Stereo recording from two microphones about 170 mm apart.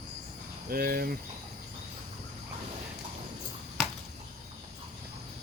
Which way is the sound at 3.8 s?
Centre (ahead or behind).